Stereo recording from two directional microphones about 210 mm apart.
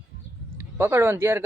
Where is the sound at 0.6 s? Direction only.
10° right (ahead or behind).